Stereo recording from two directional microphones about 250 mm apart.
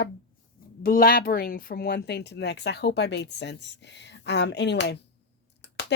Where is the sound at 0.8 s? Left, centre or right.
Left.